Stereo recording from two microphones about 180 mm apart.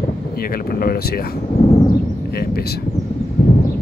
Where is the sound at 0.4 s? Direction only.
55° left (ahead or behind).